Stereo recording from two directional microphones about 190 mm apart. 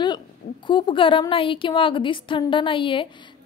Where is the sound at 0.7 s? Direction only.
25° left (ahead or behind).